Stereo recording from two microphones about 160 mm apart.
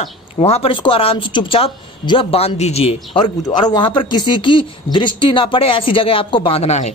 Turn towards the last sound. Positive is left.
turn(degrees=40)  # may be behind; listen again after turning